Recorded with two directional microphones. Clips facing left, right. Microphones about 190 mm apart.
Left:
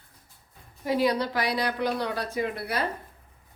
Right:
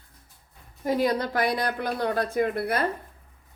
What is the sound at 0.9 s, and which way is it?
Speech, 50° right (ahead or behind).